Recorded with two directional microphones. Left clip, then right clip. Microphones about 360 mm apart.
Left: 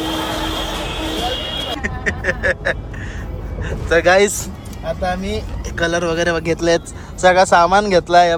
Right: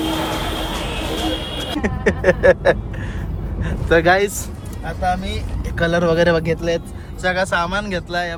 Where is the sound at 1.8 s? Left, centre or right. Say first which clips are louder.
Right 2 dB; centre.